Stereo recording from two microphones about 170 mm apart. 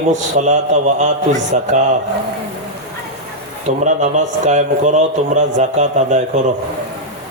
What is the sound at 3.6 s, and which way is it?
Speech, 45° right (ahead or behind).